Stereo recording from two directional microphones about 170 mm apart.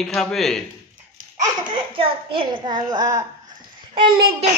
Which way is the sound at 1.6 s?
30° right (ahead or behind).